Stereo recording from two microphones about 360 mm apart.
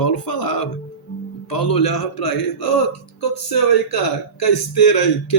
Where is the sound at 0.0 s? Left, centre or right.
Left.